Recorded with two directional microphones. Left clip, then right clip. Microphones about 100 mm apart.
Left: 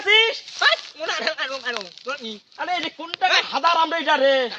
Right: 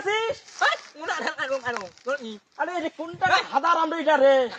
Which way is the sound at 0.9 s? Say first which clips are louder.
Left 4 dB; 25° left (ahead or behind).